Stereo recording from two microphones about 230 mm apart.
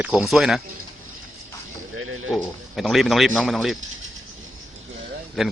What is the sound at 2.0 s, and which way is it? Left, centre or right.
Speech, right.